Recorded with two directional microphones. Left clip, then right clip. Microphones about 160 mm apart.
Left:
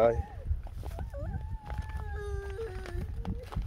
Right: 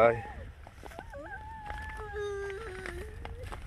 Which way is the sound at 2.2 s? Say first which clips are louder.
Right 6 dB; 90° left.